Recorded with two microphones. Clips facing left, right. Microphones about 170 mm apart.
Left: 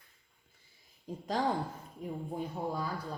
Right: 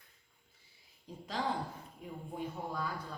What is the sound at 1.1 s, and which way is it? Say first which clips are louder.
Speech: left 7 dB; 45° left (ahead or behind).